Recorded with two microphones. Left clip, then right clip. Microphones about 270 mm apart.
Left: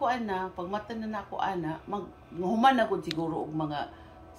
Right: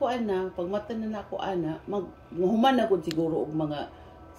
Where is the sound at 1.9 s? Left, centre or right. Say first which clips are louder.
Right 4 dB; left.